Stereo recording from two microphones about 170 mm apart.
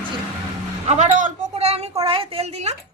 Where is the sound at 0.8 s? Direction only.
40° right (ahead or behind).